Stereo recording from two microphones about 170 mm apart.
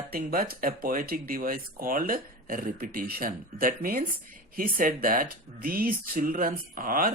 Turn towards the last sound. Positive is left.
turn(degrees=-55)  # may be behind; listen again after turning